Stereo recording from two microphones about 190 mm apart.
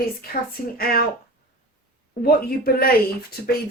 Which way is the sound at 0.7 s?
50° left (ahead or behind).